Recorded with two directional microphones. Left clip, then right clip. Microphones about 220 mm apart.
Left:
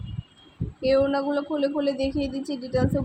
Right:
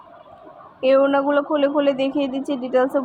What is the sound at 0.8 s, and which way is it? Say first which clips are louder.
A woman's voice: right 6 dB; 10° right (ahead or behind).